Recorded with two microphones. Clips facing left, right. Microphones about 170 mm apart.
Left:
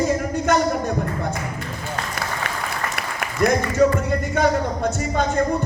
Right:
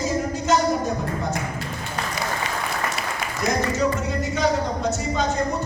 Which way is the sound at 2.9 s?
60° left (ahead or behind).